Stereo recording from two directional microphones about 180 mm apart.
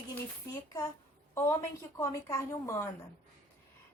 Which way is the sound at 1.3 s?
15° left (ahead or behind).